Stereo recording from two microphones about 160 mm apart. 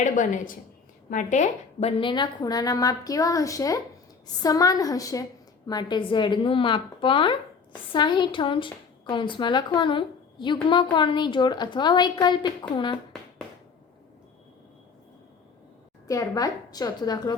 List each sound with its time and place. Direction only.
0.0 s a woman's voice: 50° left (ahead or behind)
2.0 s a woman's voice: 30° left (ahead or behind)
16.0 s a woman's voice: 20° left (ahead or behind)